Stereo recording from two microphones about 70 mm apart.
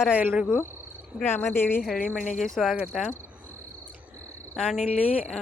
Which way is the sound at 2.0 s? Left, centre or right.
Centre.